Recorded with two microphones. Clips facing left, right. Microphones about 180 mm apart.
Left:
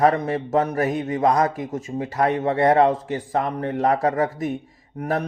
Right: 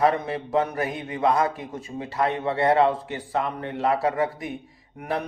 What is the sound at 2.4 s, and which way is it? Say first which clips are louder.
Speech: left 3 dB; 45° left (ahead or behind).